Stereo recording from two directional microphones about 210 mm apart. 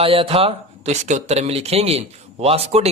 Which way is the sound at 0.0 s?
25° right (ahead or behind).